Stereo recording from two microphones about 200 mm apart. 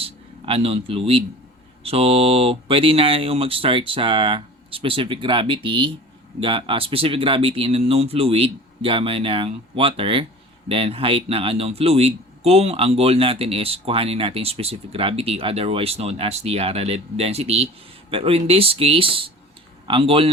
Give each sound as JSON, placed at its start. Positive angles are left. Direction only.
{"t": 0.0, "sound": "a man's voice", "side_deg": -30}